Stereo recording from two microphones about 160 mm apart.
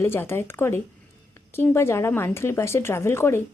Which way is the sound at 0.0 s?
15° left (ahead or behind).